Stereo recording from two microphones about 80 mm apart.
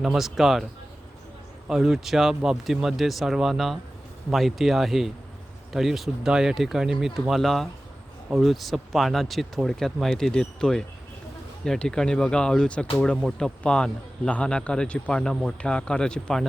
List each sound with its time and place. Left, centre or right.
0.0 s speech: centre